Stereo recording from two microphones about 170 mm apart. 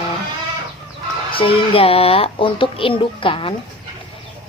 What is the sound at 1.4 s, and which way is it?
Speech, 35° left (ahead or behind).